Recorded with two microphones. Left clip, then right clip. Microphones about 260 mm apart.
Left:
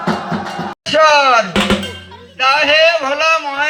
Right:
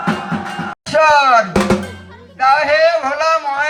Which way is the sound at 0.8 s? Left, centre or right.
Right.